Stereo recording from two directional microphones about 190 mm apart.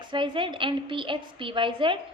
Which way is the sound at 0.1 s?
25° right (ahead or behind).